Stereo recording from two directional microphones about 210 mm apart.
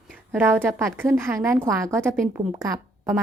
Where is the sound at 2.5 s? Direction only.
15° right (ahead or behind).